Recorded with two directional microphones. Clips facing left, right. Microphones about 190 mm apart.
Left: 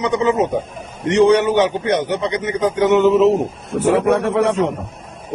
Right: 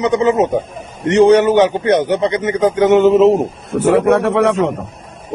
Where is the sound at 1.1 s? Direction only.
55° right (ahead or behind).